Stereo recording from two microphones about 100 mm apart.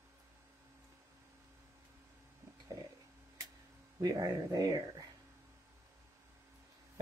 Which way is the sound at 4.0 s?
35° right (ahead or behind).